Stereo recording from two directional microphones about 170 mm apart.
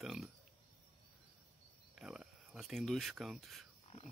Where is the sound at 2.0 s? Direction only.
5° right (ahead or behind).